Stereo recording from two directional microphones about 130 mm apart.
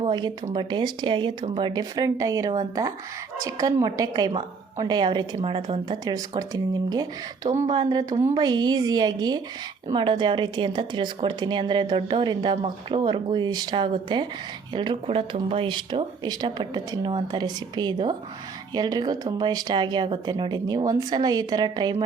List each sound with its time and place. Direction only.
0.0 s a woman's voice: 35° right (ahead or behind)
5.9 s a woman's voice: 30° right (ahead or behind)